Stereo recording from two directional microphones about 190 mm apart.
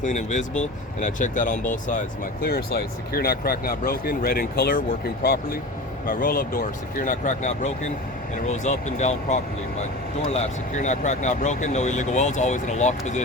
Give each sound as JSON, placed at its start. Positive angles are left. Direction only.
{"t": 0.0, "sound": "speech", "side_deg": 40}
{"t": 2.4, "sound": "speech", "side_deg": 55}